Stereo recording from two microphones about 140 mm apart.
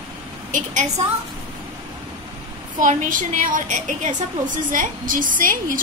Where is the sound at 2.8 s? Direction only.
70° right (ahead or behind).